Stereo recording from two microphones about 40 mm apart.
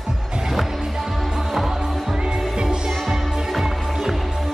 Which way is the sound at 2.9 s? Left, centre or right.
Centre.